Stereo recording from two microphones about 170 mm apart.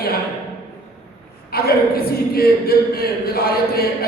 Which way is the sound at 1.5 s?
65° left (ahead or behind).